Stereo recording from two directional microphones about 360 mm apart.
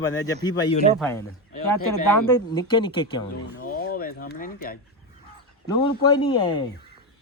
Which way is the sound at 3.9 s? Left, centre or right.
Left.